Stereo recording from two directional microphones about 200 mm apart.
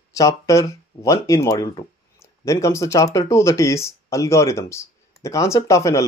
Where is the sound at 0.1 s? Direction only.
15° left (ahead or behind).